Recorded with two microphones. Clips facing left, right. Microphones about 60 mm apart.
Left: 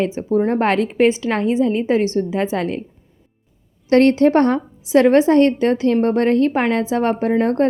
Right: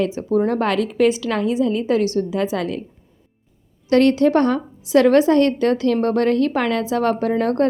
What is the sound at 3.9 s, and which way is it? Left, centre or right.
Speech, left.